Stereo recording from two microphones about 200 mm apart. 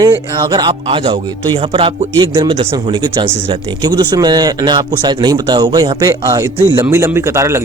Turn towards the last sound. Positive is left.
turn(degrees=-15)  # may be behind; listen again after turning